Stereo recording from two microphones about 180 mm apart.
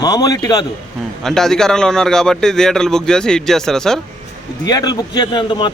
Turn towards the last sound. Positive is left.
turn(degrees=25)  # may be behind; listen again after turning